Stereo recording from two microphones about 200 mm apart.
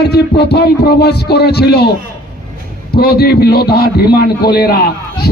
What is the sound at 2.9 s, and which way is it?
A man's voice, 55° left (ahead or behind).